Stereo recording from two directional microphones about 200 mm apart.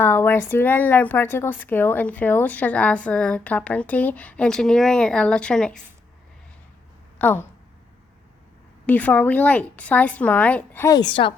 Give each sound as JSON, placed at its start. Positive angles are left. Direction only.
{"t": 0.0, "sound": "a woman's voice", "side_deg": 10}
{"t": 7.2, "sound": "speech", "side_deg": 10}
{"t": 8.9, "sound": "a woman's voice", "side_deg": 10}